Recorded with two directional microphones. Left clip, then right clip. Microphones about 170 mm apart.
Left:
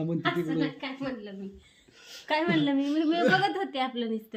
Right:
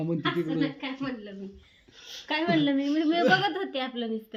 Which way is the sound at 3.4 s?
10° left (ahead or behind).